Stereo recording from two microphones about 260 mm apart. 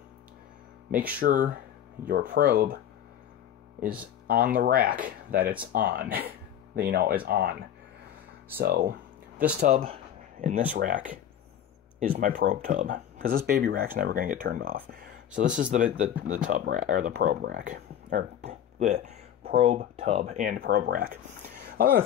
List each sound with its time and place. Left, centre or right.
1.2 s speech: right
4.6 s speech: right
8.5 s speech: right
9.6 s speech: right
12.0 s speech: right